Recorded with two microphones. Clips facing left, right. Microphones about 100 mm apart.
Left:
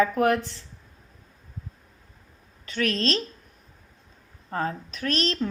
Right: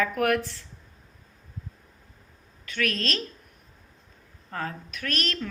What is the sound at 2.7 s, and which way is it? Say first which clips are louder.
Speech: left 3 dB; 30° left (ahead or behind).